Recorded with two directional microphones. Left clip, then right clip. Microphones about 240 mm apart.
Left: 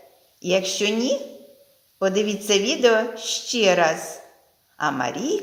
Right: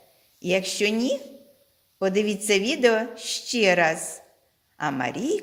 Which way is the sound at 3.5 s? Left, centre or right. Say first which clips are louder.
Left 2 dB; right.